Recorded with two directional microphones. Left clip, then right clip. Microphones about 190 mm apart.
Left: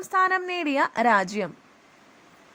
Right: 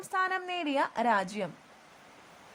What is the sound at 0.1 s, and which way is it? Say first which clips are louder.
A woman's voice: left 8 dB; 20° left (ahead or behind).